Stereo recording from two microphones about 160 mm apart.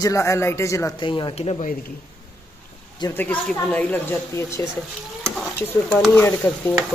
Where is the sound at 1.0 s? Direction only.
30° left (ahead or behind).